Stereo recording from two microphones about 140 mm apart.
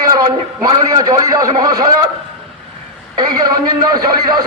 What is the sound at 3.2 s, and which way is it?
A man's voice, 30° right (ahead or behind).